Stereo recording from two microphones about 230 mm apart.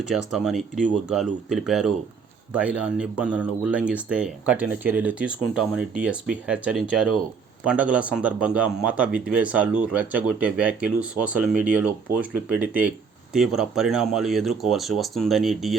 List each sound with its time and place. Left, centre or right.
0.1 s speech: centre